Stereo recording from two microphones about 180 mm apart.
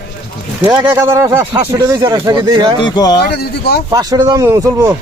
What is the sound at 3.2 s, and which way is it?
Speech, 65° left (ahead or behind).